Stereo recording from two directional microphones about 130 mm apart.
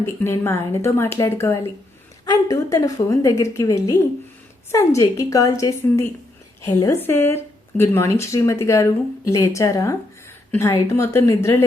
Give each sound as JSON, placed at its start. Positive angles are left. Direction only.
{"t": 0.0, "sound": "a woman's voice", "side_deg": 20}